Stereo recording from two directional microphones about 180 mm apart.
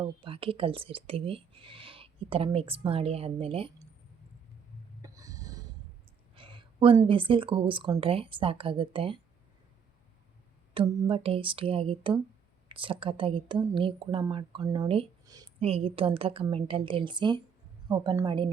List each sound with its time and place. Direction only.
0.0 s speech: 30° right (ahead or behind)
5.0 s a sound: 20° right (ahead or behind)
6.3 s speech: 25° right (ahead or behind)
10.8 s speech: 30° right (ahead or behind)